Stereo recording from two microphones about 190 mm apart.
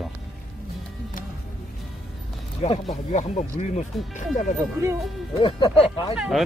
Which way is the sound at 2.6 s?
30° left (ahead or behind).